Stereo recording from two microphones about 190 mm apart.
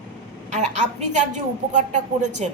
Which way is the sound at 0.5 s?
40° right (ahead or behind).